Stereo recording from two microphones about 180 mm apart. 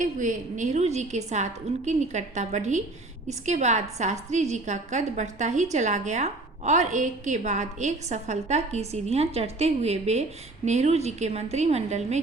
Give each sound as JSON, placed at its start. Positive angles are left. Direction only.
{"t": 0.0, "sound": "a woman's voice", "side_deg": -45}